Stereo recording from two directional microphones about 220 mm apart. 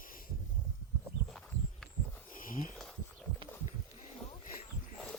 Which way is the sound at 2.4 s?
35° left (ahead or behind).